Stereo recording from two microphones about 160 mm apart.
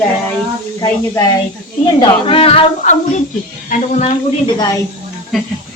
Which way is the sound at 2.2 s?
35° left (ahead or behind).